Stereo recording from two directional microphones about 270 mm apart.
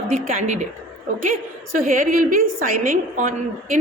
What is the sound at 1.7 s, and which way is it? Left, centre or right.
A woman's voice, right.